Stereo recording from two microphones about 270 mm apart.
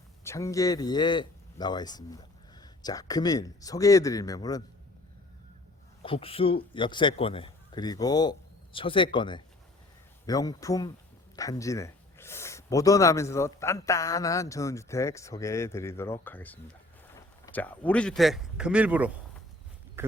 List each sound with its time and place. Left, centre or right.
0.3 s speech: centre
6.0 s speech: centre
20.0 s a sound: centre